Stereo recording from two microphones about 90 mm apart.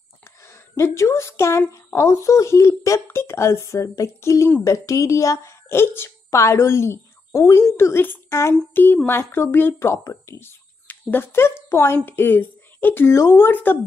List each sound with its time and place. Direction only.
0.2 s a sound: 30° left (ahead or behind)
1.7 s a woman's voice: 30° left (ahead or behind)
8.7 s speech: 20° left (ahead or behind)